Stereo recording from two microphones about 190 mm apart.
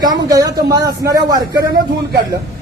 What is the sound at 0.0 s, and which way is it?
A man's voice, 20° right (ahead or behind).